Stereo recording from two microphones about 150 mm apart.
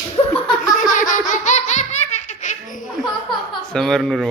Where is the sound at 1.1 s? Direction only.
55° left (ahead or behind).